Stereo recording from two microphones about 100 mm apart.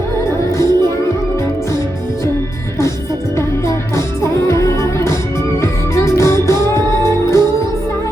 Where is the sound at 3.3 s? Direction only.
30° left (ahead or behind).